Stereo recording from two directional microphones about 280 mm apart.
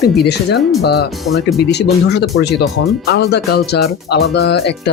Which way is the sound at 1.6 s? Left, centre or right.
Left.